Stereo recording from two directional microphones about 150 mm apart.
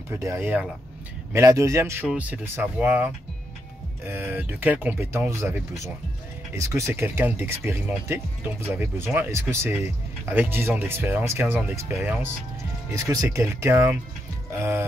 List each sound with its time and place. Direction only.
0.1 s speech: 15° right (ahead or behind)